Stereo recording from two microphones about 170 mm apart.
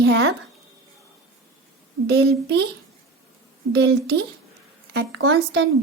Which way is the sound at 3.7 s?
75° right (ahead or behind).